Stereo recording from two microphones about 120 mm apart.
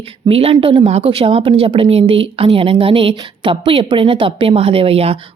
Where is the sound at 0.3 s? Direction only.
50° right (ahead or behind).